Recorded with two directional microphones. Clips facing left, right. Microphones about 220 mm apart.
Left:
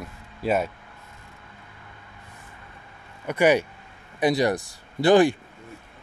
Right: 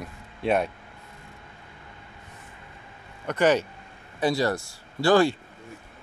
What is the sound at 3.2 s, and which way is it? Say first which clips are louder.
Speech: left 2 dB; 10° left (ahead or behind).